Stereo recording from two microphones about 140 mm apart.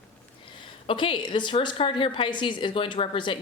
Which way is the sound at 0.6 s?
40° left (ahead or behind).